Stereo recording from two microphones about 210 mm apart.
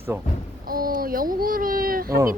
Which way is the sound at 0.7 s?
45° right (ahead or behind).